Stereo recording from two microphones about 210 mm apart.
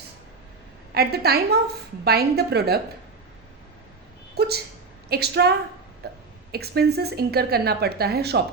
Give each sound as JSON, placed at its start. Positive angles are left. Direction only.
{"t": 0.9, "sound": "a woman's voice", "side_deg": -50}
{"t": 4.4, "sound": "dog", "side_deg": -50}
{"t": 5.0, "sound": "a woman's voice", "side_deg": -50}